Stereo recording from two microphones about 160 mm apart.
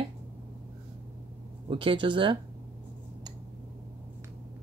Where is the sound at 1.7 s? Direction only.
35° right (ahead or behind).